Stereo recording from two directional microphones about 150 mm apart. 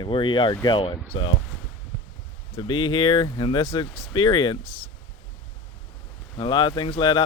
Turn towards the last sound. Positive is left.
turn(degrees=30)  # may be behind; listen again after turning